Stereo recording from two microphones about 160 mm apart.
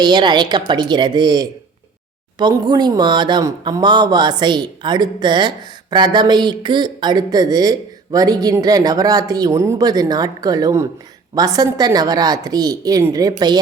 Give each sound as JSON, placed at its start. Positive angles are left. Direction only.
{"t": 0.0, "sound": "speech", "side_deg": -25}